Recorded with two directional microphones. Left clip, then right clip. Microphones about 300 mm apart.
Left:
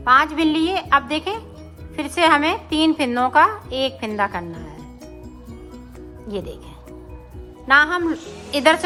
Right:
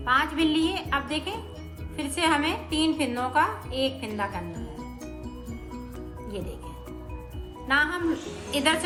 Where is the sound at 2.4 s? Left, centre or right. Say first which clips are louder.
Left 7 dB; left.